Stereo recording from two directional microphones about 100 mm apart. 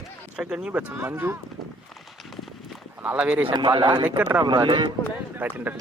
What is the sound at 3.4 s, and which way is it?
Speech, 50° right (ahead or behind).